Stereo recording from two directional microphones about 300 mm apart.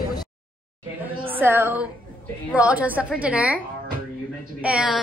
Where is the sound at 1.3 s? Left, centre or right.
Centre.